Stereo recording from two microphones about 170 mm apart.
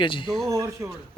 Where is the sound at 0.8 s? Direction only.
15° right (ahead or behind).